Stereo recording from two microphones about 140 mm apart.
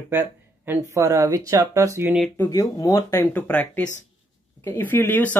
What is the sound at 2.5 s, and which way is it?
Speech, 25° left (ahead or behind).